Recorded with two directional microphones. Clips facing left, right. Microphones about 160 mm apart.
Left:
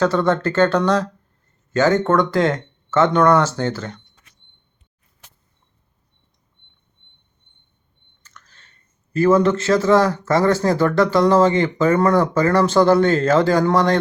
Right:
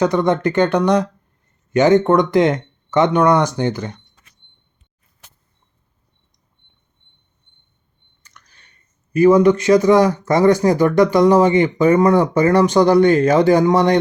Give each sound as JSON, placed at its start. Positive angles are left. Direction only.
{"t": 0.0, "sound": "speech", "side_deg": -15}
{"t": 8.2, "sound": "chewing", "side_deg": -15}
{"t": 9.1, "sound": "speech", "side_deg": -15}